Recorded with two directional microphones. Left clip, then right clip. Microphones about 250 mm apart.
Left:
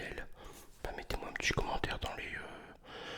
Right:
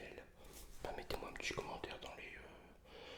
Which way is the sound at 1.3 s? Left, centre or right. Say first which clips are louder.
Left 14 dB; left.